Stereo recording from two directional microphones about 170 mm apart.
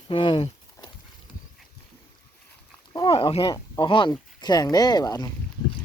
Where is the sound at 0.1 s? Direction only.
30° left (ahead or behind).